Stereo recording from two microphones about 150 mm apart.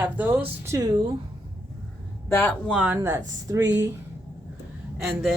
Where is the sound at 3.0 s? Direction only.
20° right (ahead or behind).